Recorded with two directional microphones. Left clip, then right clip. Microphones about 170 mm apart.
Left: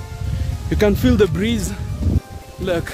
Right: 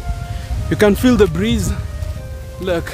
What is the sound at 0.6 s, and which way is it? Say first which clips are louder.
Speech: right 4 dB; 10° right (ahead or behind).